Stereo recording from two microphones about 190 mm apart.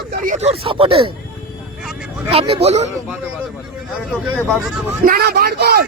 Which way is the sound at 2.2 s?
30° right (ahead or behind).